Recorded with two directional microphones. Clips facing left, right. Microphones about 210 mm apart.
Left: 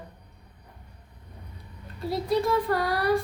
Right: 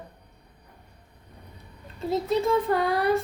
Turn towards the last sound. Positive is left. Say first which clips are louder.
# right 2 dB
turn(degrees=-20)  # may be behind; listen again after turning